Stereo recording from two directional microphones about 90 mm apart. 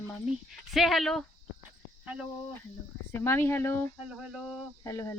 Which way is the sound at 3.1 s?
30° left (ahead or behind).